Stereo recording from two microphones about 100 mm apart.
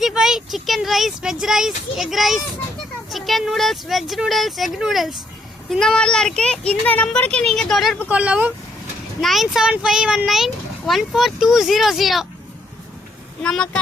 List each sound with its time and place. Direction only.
0.0 s speech: 5° right (ahead or behind)
8.0 s speech: 15° right (ahead or behind)
9.2 s speech: centre (ahead or behind)
13.4 s speech: 10° left (ahead or behind)